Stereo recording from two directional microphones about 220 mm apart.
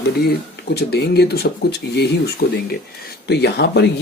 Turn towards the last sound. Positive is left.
turn(degrees=50)  # may be behind; listen again after turning